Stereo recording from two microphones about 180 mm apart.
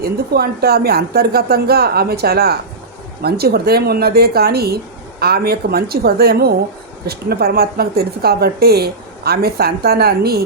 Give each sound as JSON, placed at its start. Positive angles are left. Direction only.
{"t": 0.0, "sound": "a woman's voice", "side_deg": -60}